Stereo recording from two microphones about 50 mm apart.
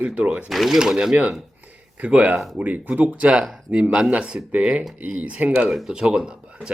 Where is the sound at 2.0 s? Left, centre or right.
Right.